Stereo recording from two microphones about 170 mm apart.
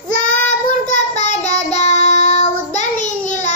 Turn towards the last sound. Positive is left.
turn(degrees=45)  # may be behind; listen again after turning